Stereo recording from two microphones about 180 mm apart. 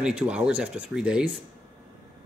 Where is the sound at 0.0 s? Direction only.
5° right (ahead or behind).